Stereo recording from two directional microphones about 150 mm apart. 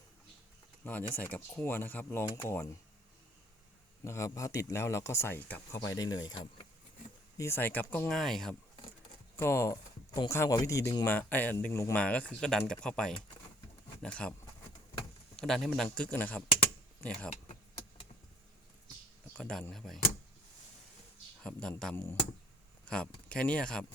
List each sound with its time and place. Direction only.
1.1 s speech: 15° left (ahead or behind)
4.0 s speech: 20° left (ahead or behind)
7.3 s speech: 15° left (ahead or behind)
9.3 s speech: 15° left (ahead or behind)
11.9 s speech: 10° left (ahead or behind)
15.4 s speech: 5° left (ahead or behind)
19.3 s speech: 5° left (ahead or behind)
21.4 s speech: 5° left (ahead or behind)
21.9 s speech: 15° left (ahead or behind)